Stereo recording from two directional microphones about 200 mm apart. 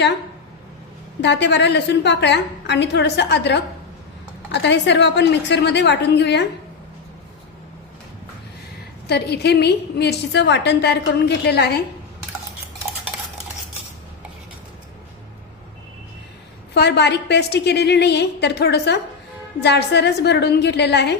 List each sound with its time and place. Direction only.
1.2 s a woman's voice: 60° left (ahead or behind)
9.0 s a woman's voice: 55° left (ahead or behind)
16.7 s a woman's voice: 55° left (ahead or behind)